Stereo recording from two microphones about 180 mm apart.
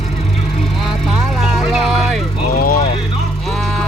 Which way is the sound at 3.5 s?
Centre (ahead or behind).